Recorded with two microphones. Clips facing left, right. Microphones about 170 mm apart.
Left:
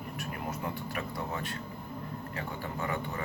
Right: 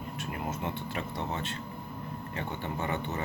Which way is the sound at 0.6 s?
25° right (ahead or behind).